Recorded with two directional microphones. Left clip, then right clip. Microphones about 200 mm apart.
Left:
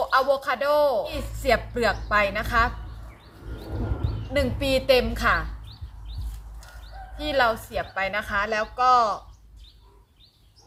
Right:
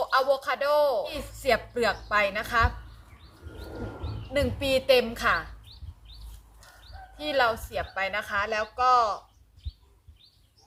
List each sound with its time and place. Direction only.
0.0 s speech: centre (ahead or behind)
3.6 s a sound: 60° right (ahead or behind)
4.4 s speech: centre (ahead or behind)
7.2 s speech: centre (ahead or behind)